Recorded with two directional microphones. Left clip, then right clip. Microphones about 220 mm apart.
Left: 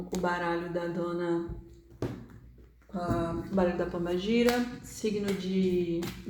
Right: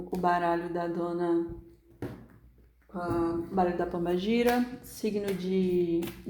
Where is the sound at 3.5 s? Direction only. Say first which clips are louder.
Left 1 dB; 40° right (ahead or behind).